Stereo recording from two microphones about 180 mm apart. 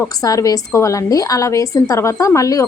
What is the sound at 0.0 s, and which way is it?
A woman's voice, 20° left (ahead or behind).